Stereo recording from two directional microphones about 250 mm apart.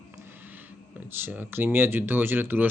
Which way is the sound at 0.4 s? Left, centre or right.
Centre.